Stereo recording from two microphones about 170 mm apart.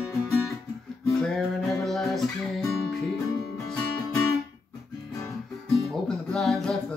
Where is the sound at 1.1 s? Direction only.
Centre (ahead or behind).